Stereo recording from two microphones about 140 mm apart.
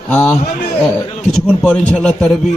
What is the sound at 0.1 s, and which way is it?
A man's voice, 15° left (ahead or behind).